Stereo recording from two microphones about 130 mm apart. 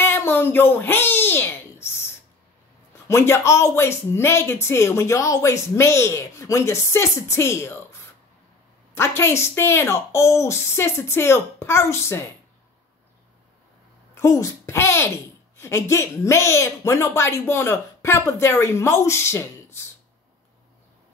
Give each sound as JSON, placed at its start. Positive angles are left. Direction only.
{"t": 0.0, "sound": "a sound", "side_deg": 20}
{"t": 3.1, "sound": "speech", "side_deg": 20}
{"t": 8.9, "sound": "speech", "side_deg": 20}
{"t": 14.1, "sound": "speech", "side_deg": 25}